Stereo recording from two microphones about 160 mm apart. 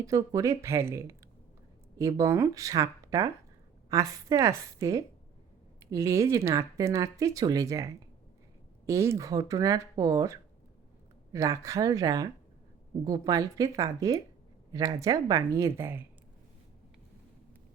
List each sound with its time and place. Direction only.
0.0 s speech: 20° right (ahead or behind)